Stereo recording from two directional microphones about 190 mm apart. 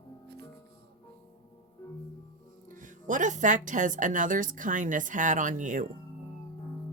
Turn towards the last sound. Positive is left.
turn(degrees=-40)  # may be behind; listen again after turning